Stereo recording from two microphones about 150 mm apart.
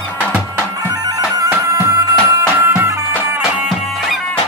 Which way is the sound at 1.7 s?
25° right (ahead or behind).